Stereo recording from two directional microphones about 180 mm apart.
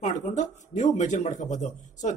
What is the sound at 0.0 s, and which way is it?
Speech, 40° left (ahead or behind).